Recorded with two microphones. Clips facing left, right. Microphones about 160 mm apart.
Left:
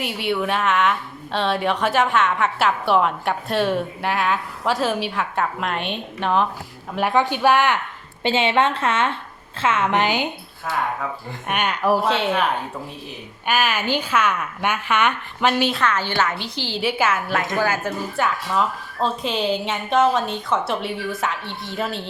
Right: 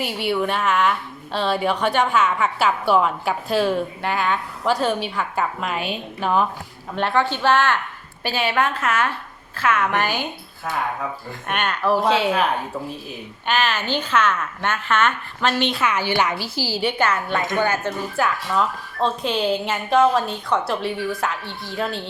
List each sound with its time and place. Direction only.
0.0 s a woman's voice: centre (ahead or behind)
6.9 s a woman's voice: 15° left (ahead or behind)
11.4 s a woman's voice: 10° left (ahead or behind)
12.0 s a woman's voice: centre (ahead or behind)
13.5 s a woman's voice: 10° left (ahead or behind)
15.7 s a woman's voice: 10° right (ahead or behind)
17.0 s a woman's voice: 5° left (ahead or behind)